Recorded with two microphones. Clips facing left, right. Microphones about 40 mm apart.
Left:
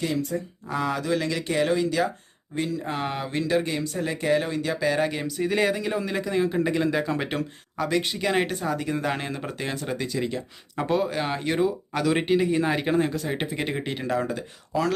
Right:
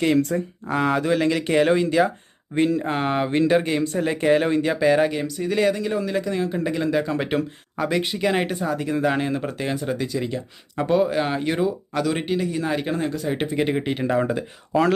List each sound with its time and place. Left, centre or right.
0.0 s speech: right
0.7 s speech: right
2.8 s speech: right
5.0 s a man's voice: centre
13.1 s speech: centre; by 14.8 s right